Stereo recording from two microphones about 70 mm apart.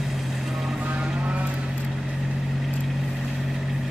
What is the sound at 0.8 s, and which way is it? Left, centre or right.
Music, centre.